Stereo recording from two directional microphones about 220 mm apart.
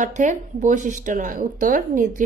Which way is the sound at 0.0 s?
35° right (ahead or behind).